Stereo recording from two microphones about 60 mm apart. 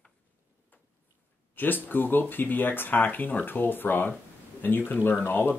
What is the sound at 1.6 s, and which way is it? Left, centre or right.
Speech, left.